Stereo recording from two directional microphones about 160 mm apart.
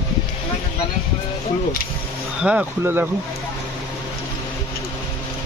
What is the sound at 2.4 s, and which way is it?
Speech, 10° right (ahead or behind).